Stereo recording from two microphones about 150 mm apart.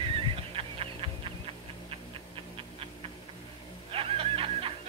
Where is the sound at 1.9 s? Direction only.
40° right (ahead or behind).